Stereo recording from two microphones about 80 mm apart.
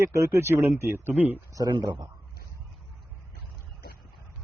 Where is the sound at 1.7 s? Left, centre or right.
Right.